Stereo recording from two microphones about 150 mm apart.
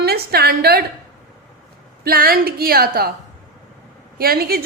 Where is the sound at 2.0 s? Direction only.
85° right.